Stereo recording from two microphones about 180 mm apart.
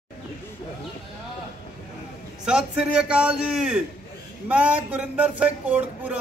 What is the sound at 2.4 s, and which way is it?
A woman's voice, 5° right (ahead or behind).